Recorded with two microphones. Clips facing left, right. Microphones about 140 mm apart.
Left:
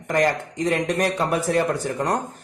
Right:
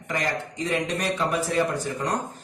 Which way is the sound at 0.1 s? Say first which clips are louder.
Left 7 dB; 50° left (ahead or behind).